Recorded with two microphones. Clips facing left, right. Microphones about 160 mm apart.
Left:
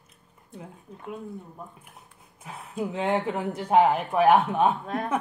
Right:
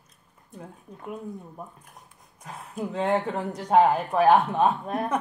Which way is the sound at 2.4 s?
5° left (ahead or behind).